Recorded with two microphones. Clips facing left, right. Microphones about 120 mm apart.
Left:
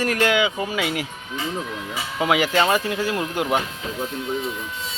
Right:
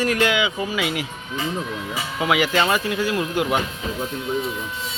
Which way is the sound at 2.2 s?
40° left (ahead or behind).